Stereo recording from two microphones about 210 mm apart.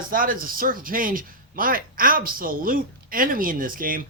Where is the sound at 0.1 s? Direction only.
40° right (ahead or behind).